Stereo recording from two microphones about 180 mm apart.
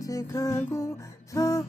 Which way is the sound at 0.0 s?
20° left (ahead or behind).